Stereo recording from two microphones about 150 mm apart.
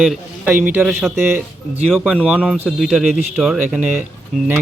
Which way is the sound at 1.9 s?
5° right (ahead or behind).